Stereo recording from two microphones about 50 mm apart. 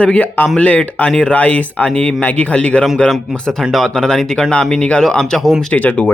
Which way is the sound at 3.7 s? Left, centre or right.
Centre.